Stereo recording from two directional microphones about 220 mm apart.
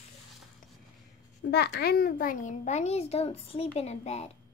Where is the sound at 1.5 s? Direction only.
50° left (ahead or behind).